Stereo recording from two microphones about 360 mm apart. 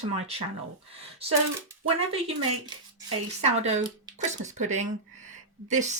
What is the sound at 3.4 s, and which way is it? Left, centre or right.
Speech, centre.